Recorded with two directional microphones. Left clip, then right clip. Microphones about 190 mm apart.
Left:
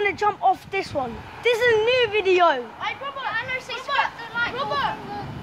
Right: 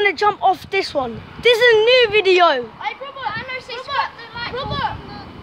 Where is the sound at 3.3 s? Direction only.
5° right (ahead or behind).